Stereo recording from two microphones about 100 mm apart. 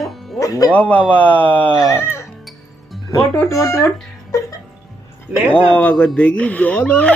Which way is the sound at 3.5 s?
30° left (ahead or behind).